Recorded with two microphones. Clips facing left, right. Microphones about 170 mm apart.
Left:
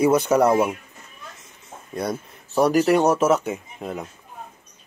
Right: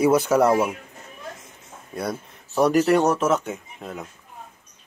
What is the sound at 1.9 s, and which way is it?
Speech, 5° right (ahead or behind).